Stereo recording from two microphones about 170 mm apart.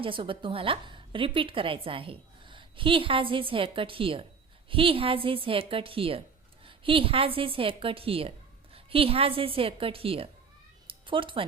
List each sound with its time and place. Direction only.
0.0 s a woman's voice: 30° right (ahead or behind)
10.8 s cat: 30° right (ahead or behind)